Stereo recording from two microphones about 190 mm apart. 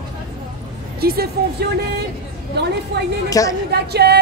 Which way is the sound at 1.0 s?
55° right (ahead or behind).